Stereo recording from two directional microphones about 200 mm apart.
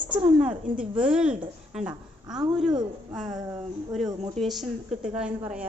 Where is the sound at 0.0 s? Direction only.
25° right (ahead or behind).